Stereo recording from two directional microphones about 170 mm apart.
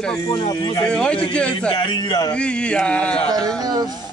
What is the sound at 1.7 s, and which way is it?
Speech, 30° left (ahead or behind).